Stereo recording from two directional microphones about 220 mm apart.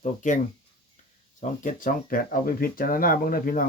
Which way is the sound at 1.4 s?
35° left (ahead or behind).